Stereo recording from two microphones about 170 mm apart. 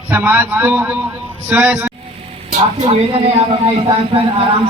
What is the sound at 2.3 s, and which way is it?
Speech, 35° right (ahead or behind).